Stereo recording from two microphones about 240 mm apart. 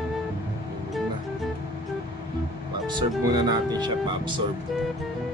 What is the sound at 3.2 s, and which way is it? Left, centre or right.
Speech, centre.